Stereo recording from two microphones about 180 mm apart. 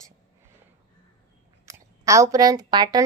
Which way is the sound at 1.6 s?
15° right (ahead or behind).